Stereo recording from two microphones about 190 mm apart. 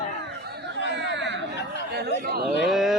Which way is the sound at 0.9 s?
70° right (ahead or behind).